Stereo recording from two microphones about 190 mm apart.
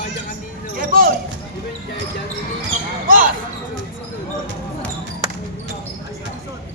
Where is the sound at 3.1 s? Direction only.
45° right (ahead or behind).